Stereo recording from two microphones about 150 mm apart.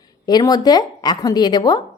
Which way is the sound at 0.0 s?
25° left (ahead or behind).